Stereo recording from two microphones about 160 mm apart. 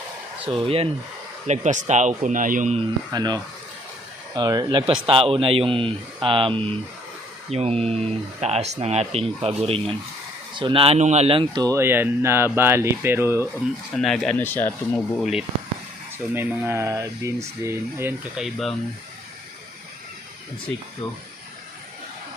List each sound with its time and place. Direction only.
0.4 s speech: 35° right (ahead or behind)
1.5 s speech: 45° right (ahead or behind)
3.1 s speech: 25° right (ahead or behind)
13.9 s speech: centre (ahead or behind)
15.2 s speech: centre (ahead or behind)
16.1 s speech: 15° right (ahead or behind)
18.3 s speech: centre (ahead or behind)